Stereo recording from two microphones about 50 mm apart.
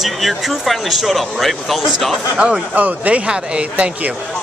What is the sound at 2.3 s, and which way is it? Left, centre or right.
Speech, centre.